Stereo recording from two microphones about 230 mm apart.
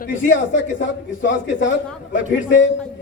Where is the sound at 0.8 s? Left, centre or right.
Left.